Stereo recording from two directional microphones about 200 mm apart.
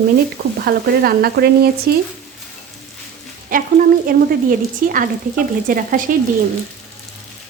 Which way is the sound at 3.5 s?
45° right (ahead or behind).